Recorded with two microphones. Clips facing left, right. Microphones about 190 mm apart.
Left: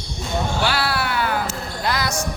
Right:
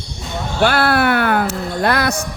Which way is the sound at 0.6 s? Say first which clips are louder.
Right 12 dB; 55° right (ahead or behind).